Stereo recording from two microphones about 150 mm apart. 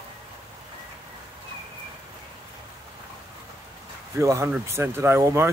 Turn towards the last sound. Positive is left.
turn(degrees=-15)  # may be behind; listen again after turning